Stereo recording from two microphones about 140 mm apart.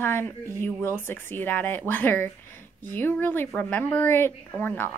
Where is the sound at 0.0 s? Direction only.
15° left (ahead or behind).